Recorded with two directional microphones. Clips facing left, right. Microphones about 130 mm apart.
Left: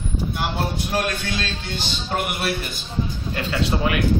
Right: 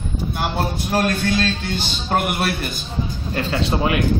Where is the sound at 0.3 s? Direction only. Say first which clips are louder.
Right 4 dB; 45° right (ahead or behind).